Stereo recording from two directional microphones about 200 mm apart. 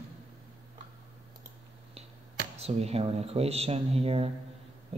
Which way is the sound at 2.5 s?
30° right (ahead or behind).